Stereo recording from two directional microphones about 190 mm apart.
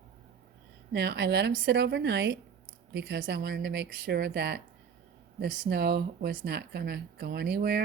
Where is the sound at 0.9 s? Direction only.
60° right (ahead or behind).